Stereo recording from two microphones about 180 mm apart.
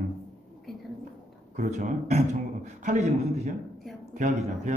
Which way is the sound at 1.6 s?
45° right (ahead or behind).